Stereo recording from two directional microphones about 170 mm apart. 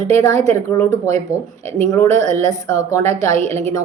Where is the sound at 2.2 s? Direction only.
20° left (ahead or behind).